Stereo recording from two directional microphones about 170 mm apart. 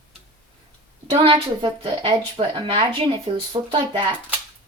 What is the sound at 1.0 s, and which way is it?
A woman's voice, 35° right (ahead or behind).